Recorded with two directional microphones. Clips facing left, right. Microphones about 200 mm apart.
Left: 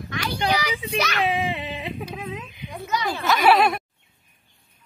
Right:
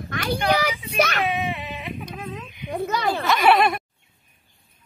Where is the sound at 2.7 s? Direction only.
55° right (ahead or behind).